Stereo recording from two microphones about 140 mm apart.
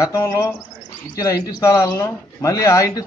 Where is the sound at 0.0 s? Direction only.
20° left (ahead or behind).